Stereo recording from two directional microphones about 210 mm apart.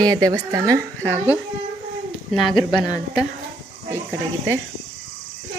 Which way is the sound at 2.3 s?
Centre (ahead or behind).